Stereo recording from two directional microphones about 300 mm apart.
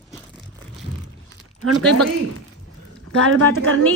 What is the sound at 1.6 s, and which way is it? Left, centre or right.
Speech, right.